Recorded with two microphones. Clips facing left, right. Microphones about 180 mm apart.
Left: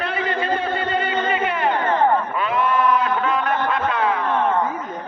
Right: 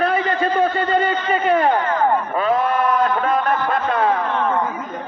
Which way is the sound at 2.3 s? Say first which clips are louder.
Right 5 dB; 40° right (ahead or behind).